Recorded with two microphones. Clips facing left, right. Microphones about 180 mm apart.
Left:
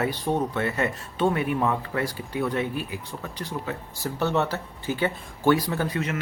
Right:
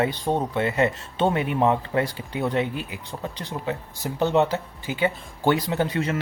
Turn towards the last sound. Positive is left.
turn(degrees=-30)  # may be behind; listen again after turning